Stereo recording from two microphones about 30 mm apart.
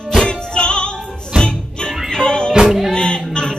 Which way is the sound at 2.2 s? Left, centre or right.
Left.